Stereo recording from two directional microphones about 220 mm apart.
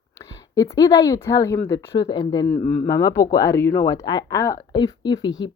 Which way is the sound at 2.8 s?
15° left (ahead or behind).